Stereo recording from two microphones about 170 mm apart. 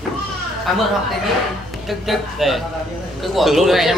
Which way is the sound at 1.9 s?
Centre (ahead or behind).